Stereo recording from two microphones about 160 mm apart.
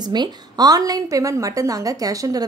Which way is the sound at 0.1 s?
25° right (ahead or behind).